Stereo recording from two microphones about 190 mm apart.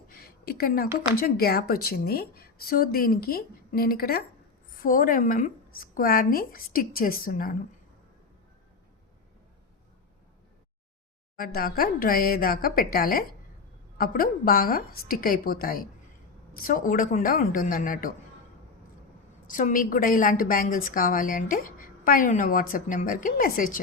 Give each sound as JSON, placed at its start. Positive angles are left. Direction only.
{"t": 0.1, "sound": "a sound", "side_deg": 50}
{"t": 0.9, "sound": "a woman's voice", "side_deg": 50}
{"t": 11.3, "sound": "a woman's voice", "side_deg": 50}
{"t": 19.5, "sound": "a woman's voice", "side_deg": 45}